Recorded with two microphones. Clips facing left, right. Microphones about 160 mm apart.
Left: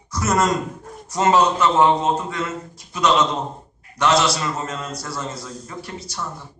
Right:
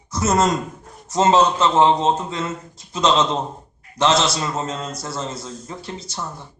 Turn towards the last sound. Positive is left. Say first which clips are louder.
# even
turn(degrees=-25)  # may be behind; listen again after turning